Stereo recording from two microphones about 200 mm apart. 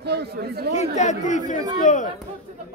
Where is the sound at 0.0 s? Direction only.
55° right (ahead or behind).